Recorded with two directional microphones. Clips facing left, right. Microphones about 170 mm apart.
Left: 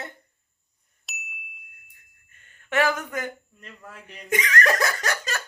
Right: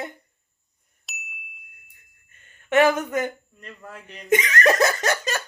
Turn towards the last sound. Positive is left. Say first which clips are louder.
# right 5 dB
turn(degrees=-20)  # may be behind; listen again after turning